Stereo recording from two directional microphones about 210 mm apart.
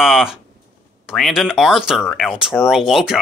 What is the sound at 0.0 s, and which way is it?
Speech, centre (ahead or behind).